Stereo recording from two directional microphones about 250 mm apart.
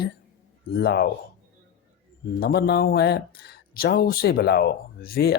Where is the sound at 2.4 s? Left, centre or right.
Left.